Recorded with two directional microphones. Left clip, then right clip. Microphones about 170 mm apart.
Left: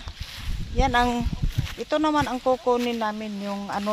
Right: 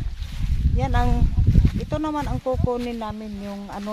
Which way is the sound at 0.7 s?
40° left (ahead or behind).